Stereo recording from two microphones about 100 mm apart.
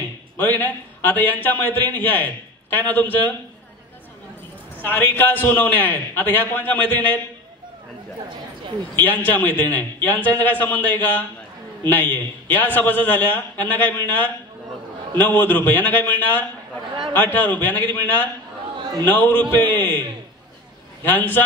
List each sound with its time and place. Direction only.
0.4 s a man's voice: 20° left (ahead or behind)
4.7 s a man's voice: 20° left (ahead or behind)
8.9 s a man's voice: 20° left (ahead or behind)
21.1 s a man's voice: 20° left (ahead or behind)